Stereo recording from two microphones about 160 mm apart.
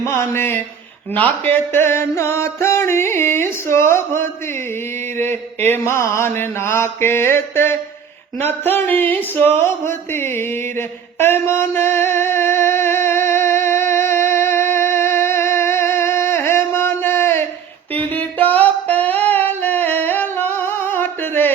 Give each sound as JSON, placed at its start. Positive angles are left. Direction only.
{"t": 0.0, "sound": "a sound", "side_deg": 15}
{"t": 17.9, "sound": "music", "side_deg": 10}
{"t": 18.4, "sound": "female singing", "side_deg": 10}